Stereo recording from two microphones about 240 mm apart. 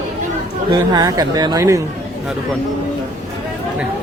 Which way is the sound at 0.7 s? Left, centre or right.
Centre.